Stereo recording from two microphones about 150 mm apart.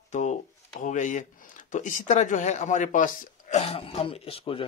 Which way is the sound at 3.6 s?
45° left (ahead or behind).